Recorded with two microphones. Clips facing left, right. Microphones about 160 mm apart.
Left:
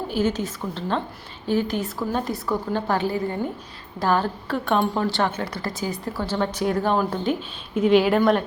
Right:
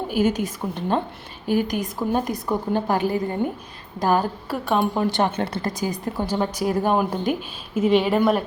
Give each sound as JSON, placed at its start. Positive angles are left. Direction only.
{"t": 0.1, "sound": "speech", "side_deg": -10}
{"t": 5.0, "sound": "speech", "side_deg": -20}